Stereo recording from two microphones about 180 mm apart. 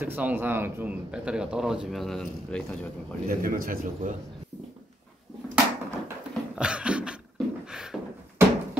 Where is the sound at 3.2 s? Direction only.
50° right (ahead or behind).